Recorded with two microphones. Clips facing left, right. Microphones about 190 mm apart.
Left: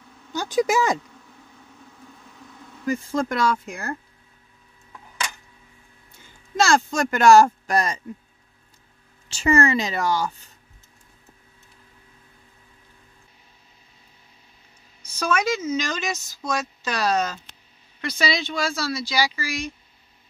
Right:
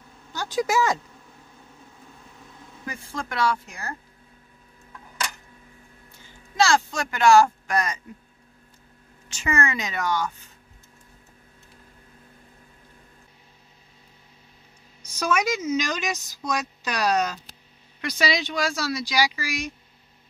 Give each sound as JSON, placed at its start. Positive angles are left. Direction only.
{"t": 0.3, "sound": "a woman's voice", "side_deg": 20}
{"t": 2.9, "sound": "speech", "side_deg": 45}
{"t": 6.5, "sound": "speech", "side_deg": 45}
{"t": 9.3, "sound": "a woman's voice", "side_deg": 30}
{"t": 15.1, "sound": "a woman's voice", "side_deg": -15}